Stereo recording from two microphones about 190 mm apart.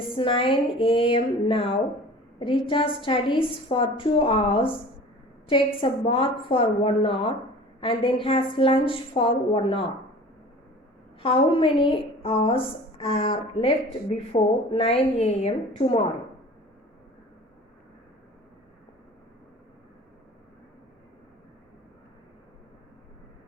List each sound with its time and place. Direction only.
0.2 s a woman's voice: 30° left (ahead or behind)
11.2 s a woman's voice: 30° left (ahead or behind)